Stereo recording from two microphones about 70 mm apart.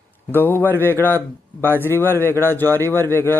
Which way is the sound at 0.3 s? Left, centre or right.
Left.